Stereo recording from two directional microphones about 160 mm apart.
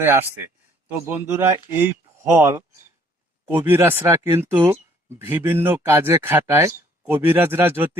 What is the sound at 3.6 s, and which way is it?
Speech, 15° right (ahead or behind).